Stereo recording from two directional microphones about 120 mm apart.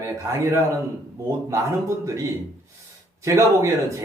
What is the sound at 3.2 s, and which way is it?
Speech, 25° right (ahead or behind).